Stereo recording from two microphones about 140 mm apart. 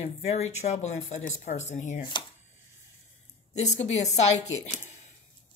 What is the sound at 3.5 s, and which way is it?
Speech, 55° left (ahead or behind).